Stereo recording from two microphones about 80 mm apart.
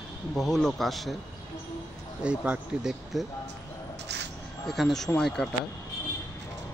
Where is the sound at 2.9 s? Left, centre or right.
Centre.